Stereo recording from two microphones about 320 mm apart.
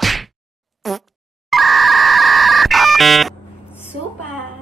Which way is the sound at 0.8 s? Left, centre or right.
Centre.